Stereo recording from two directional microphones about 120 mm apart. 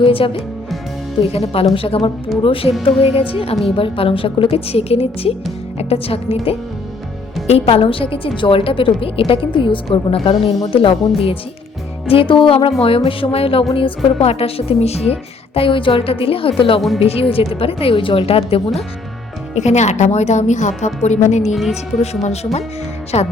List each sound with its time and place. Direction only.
0.0 s a woman's voice: 50° left (ahead or behind)
1.3 s a woman's voice: 55° left (ahead or behind)
15.5 s a woman's voice: 45° left (ahead or behind)
19.5 s a woman's voice: 75° left (ahead or behind)
21.5 s a woman's voice: centre (ahead or behind)
22.0 s a woman's voice: 60° left (ahead or behind)